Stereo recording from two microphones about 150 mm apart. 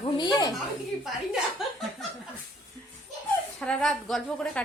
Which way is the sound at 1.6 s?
Centre (ahead or behind).